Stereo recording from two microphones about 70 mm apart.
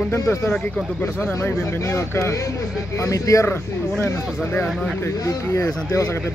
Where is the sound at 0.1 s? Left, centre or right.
Left.